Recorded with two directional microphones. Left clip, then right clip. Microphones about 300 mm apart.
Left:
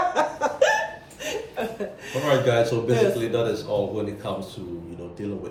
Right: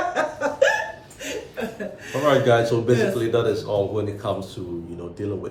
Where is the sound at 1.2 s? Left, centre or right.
Centre.